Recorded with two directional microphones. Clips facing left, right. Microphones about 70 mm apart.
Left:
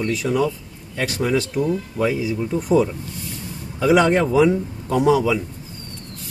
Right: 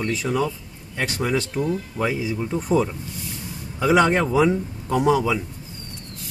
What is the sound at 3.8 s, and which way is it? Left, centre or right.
Speech, centre.